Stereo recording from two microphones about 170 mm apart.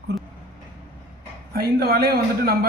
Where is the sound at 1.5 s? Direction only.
65° right (ahead or behind).